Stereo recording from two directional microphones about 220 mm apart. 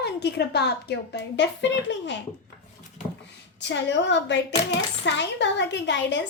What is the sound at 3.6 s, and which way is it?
A woman's voice, 55° left (ahead or behind).